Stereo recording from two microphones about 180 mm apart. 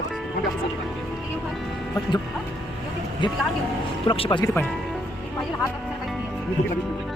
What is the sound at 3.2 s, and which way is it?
Speech, 25° left (ahead or behind).